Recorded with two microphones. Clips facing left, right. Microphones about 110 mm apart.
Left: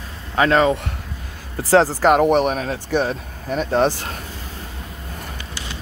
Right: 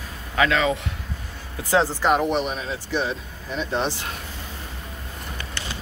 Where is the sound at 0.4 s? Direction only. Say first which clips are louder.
Left 5 dB; 40° left (ahead or behind).